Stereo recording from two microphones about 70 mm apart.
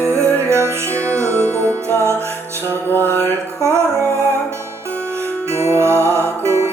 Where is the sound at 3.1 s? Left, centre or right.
Right.